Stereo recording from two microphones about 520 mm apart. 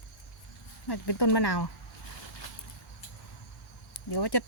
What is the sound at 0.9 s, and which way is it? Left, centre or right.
Speech, left.